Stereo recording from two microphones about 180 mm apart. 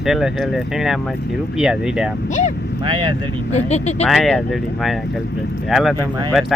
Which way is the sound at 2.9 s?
25° right (ahead or behind).